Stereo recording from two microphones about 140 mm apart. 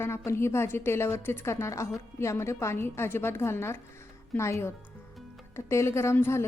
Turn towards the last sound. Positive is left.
turn(degrees=20)  # may be behind; listen again after turning